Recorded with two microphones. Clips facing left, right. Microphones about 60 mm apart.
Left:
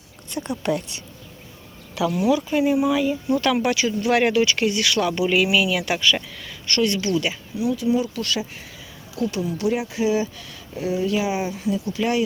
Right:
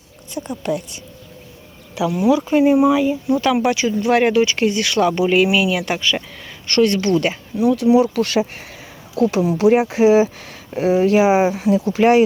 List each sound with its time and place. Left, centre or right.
0.3 s a woman's voice: centre
2.0 s speech: right
6.4 s a sound: right
6.7 s speech: right
7.6 s speech: right
9.6 s speech: right
10.0 s speech: right
11.0 s speech: right
12.0 s speech: right